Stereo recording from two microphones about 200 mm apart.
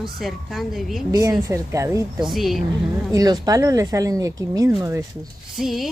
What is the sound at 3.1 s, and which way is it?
Speech, 20° right (ahead or behind).